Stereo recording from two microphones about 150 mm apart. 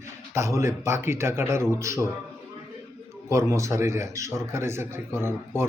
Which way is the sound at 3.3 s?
20° right (ahead or behind).